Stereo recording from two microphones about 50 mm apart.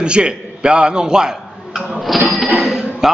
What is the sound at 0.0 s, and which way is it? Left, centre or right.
A man's voice, centre.